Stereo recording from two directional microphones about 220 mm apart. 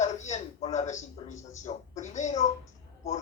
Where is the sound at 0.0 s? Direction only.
30° left (ahead or behind).